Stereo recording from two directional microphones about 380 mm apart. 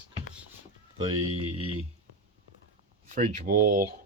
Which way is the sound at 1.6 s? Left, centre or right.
Right.